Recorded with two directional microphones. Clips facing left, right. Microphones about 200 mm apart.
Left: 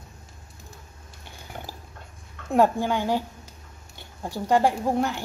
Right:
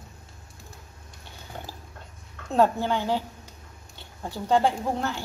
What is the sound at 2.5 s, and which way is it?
A woman's voice, 15° left (ahead or behind).